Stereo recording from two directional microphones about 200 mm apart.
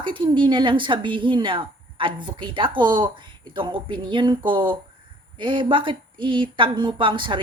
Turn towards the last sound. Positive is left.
turn(degrees=-25)  # may be behind; listen again after turning